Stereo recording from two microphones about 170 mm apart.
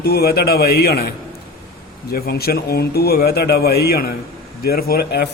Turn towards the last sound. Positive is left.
turn(degrees=70)  # may be behind; listen again after turning